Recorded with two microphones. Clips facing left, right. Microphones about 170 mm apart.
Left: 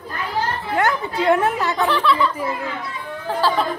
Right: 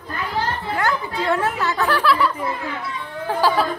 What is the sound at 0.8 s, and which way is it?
Speech, 20° left (ahead or behind).